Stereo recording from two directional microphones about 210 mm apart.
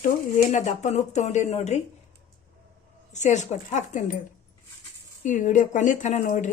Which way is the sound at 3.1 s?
35° left (ahead or behind).